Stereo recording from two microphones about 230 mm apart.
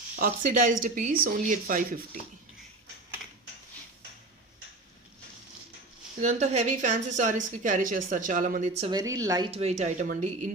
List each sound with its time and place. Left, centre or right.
0.2 s speech: right
6.2 s speech: right